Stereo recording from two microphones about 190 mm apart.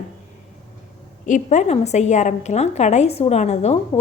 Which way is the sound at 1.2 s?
40° left (ahead or behind).